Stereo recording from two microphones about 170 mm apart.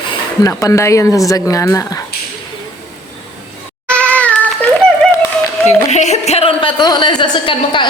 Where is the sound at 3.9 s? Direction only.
5° left (ahead or behind).